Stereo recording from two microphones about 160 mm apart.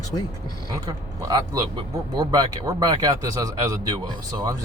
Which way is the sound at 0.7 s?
25° right (ahead or behind).